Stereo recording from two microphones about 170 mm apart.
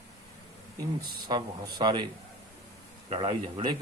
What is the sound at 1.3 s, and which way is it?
Speech, 25° right (ahead or behind).